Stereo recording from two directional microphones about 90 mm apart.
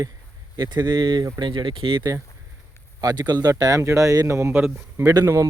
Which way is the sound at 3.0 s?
50° right (ahead or behind).